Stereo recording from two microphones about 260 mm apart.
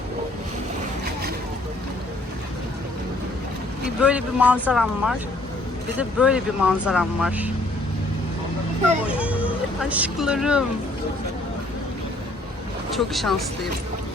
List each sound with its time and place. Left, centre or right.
3.8 s speech: centre
9.0 s speech: centre
12.9 s speech: centre